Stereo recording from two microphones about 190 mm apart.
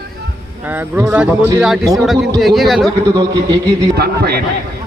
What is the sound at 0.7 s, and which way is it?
A man's voice, 10° right (ahead or behind).